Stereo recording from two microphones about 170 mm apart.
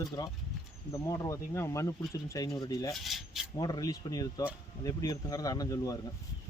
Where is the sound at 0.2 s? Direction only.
20° left (ahead or behind).